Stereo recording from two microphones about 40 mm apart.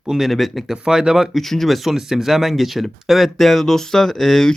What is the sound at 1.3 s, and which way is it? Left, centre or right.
Speech, centre.